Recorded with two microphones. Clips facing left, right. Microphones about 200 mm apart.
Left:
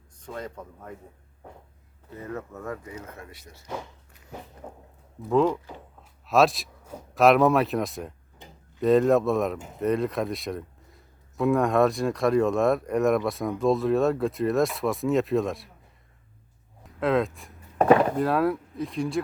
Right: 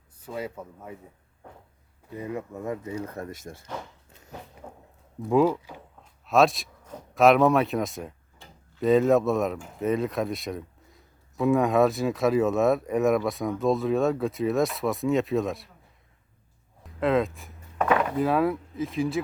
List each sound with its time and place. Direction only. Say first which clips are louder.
0.2 s speech: right 2 dB; 5° right (ahead or behind)
2.1 s speech: right 2 dB; 15° right (ahead or behind)
3.1 s speech: right 7 dB; 40° right (ahead or behind)
4.6 s speech: left 2 dB; 5° left (ahead or behind)
5.3 s speech: right 1 dB; 10° right (ahead or behind)
8.4 s tick-tock: left 3 dB; 20° left (ahead or behind)
8.8 s a man's voice: even; centre (ahead or behind)
17.0 s a man's voice: even; centre (ahead or behind)
17.7 s chop: left 6 dB; 35° left (ahead or behind)
18.2 s a man's voice: even; centre (ahead or behind)